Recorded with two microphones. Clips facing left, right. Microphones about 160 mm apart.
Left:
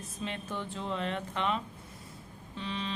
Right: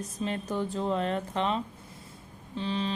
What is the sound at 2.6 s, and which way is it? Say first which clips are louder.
Speech: right 6 dB; 35° right (ahead or behind).